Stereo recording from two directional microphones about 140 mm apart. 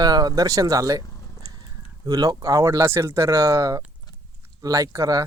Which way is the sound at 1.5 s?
35° left (ahead or behind).